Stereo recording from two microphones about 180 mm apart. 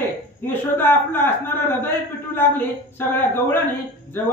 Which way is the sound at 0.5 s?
10° left (ahead or behind).